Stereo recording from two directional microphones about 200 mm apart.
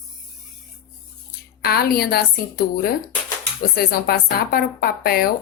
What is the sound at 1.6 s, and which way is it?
Speech, 50° left (ahead or behind).